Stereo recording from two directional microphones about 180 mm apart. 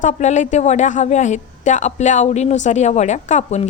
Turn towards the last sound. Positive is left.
turn(degrees=40)  # may be behind; listen again after turning